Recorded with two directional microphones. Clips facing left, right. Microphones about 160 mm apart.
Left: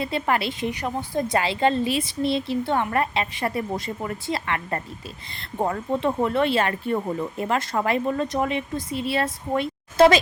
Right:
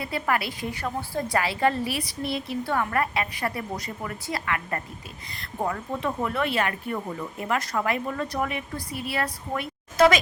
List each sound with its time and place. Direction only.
0.0 s speech: 25° left (ahead or behind)